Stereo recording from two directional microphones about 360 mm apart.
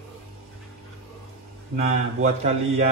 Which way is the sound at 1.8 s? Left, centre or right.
Centre.